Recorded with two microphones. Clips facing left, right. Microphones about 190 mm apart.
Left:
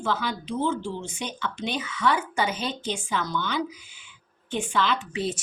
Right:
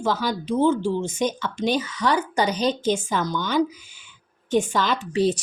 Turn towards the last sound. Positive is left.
turn(degrees=-35)  # may be behind; listen again after turning